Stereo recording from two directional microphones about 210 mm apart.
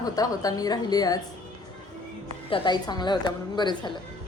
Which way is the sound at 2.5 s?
20° left (ahead or behind).